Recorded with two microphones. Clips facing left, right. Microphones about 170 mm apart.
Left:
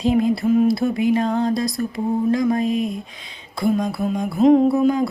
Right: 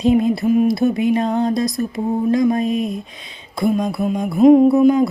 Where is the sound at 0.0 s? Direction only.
20° right (ahead or behind).